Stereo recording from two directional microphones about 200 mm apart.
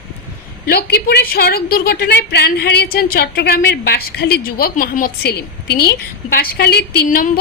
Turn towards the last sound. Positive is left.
turn(degrees=45)  # may be behind; listen again after turning